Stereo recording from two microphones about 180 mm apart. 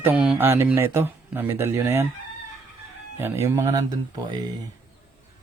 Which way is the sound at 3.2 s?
15° right (ahead or behind).